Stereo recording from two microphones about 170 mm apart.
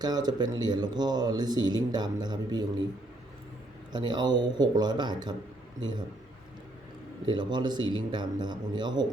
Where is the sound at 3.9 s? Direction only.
25° right (ahead or behind).